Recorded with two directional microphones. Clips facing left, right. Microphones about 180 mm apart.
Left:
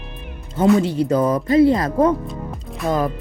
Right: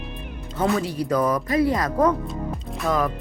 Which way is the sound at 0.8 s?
25° left (ahead or behind).